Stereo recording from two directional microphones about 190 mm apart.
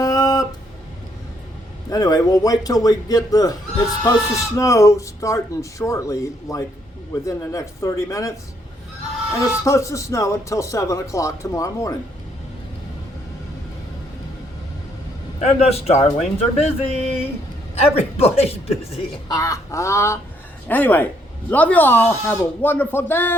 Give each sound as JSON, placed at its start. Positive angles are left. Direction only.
{"t": 0.0, "sound": "music", "side_deg": 20}
{"t": 1.9, "sound": "a man's voice", "side_deg": 20}
{"t": 9.6, "sound": "speech", "side_deg": 15}
{"t": 15.4, "sound": "speech", "side_deg": 35}
{"t": 19.4, "sound": "speech", "side_deg": 15}